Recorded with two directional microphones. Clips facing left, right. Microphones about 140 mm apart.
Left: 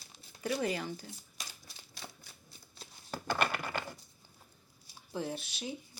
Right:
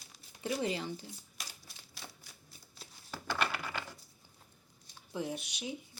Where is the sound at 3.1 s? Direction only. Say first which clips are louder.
Left 2 dB; 50° left (ahead or behind).